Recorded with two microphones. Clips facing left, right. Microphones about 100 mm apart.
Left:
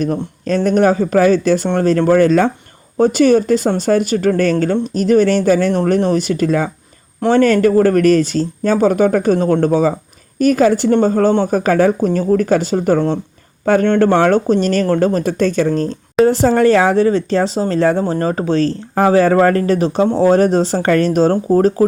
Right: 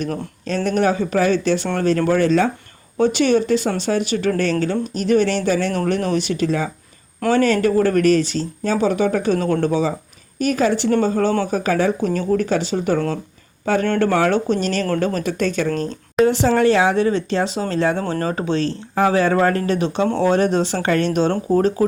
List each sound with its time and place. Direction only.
0.4 s speech: 40° left (ahead or behind)
14.3 s speech: 40° left (ahead or behind)